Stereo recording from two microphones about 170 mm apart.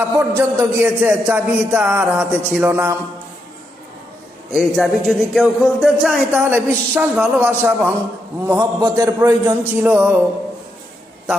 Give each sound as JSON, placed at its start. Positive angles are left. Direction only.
{"t": 0.0, "sound": "a man's voice", "side_deg": -15}
{"t": 4.5, "sound": "speech", "side_deg": 0}
{"t": 6.3, "sound": "a man's voice", "side_deg": -15}